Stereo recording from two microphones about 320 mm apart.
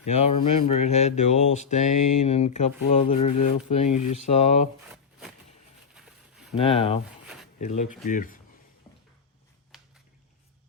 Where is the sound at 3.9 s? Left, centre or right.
Left.